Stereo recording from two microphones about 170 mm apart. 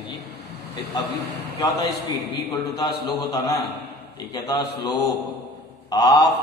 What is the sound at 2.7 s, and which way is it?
A man's voice, 20° left (ahead or behind).